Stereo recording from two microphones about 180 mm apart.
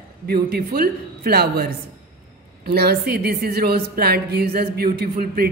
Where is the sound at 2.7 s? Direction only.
55° right (ahead or behind).